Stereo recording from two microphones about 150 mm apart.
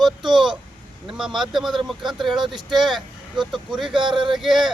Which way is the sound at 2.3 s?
30° right (ahead or behind).